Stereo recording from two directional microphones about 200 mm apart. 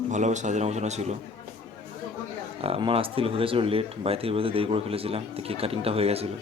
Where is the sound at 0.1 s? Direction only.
35° right (ahead or behind).